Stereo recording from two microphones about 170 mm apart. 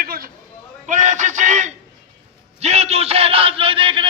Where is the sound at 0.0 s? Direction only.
60° right (ahead or behind).